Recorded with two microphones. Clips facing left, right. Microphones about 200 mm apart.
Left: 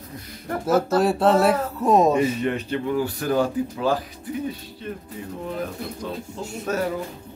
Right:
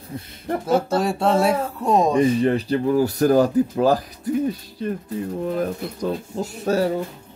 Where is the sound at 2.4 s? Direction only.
35° right (ahead or behind).